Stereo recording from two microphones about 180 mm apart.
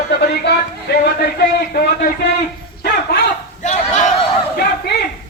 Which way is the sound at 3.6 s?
40° left (ahead or behind).